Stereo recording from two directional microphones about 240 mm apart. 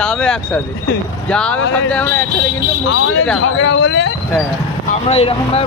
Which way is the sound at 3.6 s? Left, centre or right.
Left.